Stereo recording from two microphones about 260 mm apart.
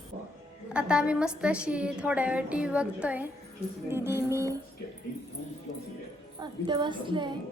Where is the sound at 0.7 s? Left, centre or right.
Centre.